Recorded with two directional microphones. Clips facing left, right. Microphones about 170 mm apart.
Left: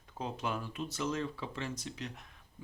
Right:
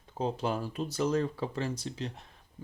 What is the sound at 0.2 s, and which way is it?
Speech, 35° right (ahead or behind).